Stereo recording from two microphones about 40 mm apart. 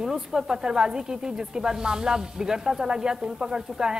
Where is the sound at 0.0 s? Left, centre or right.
Centre.